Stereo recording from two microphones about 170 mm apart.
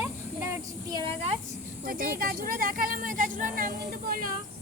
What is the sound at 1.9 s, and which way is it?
Speech, 60° right (ahead or behind).